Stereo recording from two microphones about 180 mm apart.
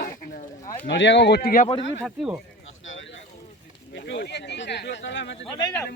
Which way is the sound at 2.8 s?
90° left.